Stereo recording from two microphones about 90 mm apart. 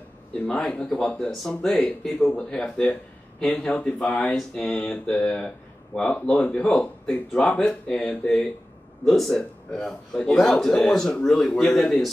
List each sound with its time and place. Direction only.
0.5 s a man's voice: 15° left (ahead or behind)